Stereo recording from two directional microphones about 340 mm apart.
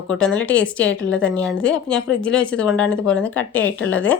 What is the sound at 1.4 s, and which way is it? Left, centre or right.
Speech, centre.